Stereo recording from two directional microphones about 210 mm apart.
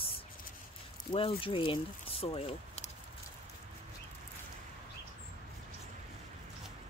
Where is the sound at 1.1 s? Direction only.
25° left (ahead or behind).